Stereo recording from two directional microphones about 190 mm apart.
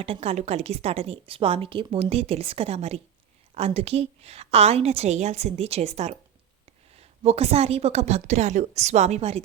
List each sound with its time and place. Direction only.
0.0 s a woman's voice: 30° right (ahead or behind)